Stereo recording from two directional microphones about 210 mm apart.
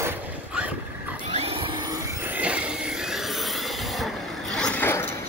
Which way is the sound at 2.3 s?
5° right (ahead or behind).